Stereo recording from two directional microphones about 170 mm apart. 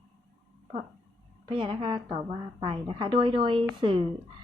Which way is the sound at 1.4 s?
30° right (ahead or behind).